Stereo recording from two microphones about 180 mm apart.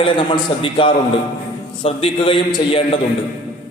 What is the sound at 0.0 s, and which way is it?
A man's voice, 30° left (ahead or behind).